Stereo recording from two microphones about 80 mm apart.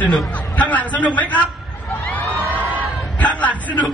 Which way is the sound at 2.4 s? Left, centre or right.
Right.